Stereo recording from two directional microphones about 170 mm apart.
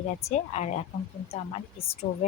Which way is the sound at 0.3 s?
40° left (ahead or behind).